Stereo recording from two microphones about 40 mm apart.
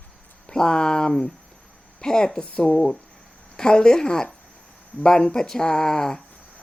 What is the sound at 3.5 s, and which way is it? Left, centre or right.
A woman's voice, centre.